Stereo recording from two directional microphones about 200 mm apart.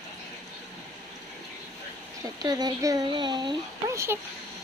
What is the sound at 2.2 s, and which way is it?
Speech, 20° right (ahead or behind).